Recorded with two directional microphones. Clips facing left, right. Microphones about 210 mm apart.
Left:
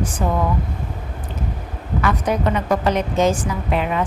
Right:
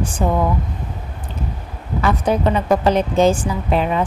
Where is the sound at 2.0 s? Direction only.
30° right (ahead or behind).